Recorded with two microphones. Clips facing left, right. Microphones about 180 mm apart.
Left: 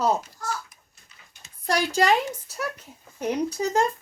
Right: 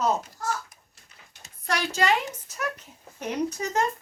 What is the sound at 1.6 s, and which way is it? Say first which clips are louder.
Speech: left 4 dB; 35° left (ahead or behind).